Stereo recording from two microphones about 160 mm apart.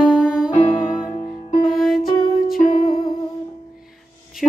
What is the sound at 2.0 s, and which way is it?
Music, 65° left (ahead or behind).